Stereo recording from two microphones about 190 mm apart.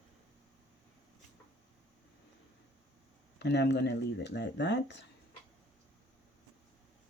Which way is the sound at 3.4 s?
65° left (ahead or behind).